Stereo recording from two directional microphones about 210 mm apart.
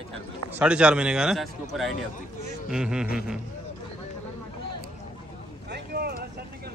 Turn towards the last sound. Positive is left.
turn(degrees=-50)  # may be behind; listen again after turning